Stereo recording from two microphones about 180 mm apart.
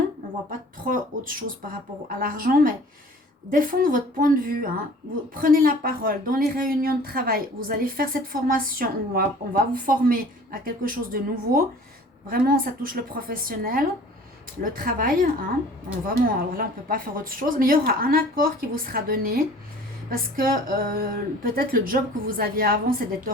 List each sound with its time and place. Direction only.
0.9 s speech: 50° right (ahead or behind)